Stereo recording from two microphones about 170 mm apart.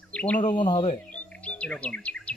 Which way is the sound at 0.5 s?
25° left (ahead or behind).